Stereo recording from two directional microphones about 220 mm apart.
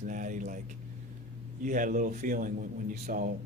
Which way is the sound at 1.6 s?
35° right (ahead or behind).